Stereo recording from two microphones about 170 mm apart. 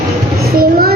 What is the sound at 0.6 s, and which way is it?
Child singing, 60° right (ahead or behind).